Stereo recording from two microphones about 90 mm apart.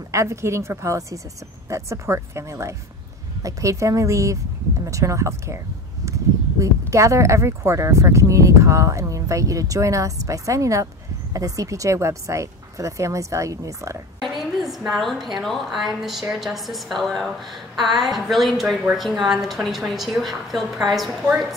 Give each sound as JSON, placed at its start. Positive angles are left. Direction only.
{"t": 0.1, "sound": "speech", "side_deg": -35}
{"t": 6.6, "sound": "speech", "side_deg": -35}
{"t": 14.2, "sound": "a sound", "side_deg": 0}
{"t": 14.9, "sound": "a woman's voice", "side_deg": 0}